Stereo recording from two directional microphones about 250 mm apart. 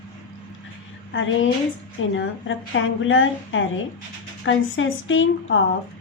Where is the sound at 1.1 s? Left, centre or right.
Left.